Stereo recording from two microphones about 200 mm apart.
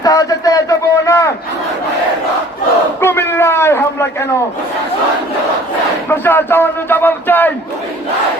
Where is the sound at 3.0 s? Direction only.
10° left (ahead or behind).